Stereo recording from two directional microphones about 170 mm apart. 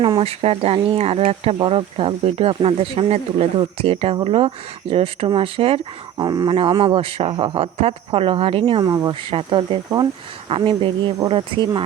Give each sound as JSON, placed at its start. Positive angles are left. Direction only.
{"t": 0.0, "sound": "speech", "side_deg": -35}